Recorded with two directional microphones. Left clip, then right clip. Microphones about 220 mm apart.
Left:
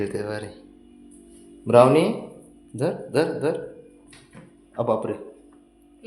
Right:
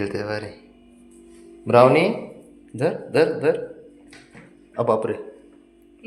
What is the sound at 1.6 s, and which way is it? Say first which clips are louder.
A man's voice: right 1 dB; 10° left (ahead or behind).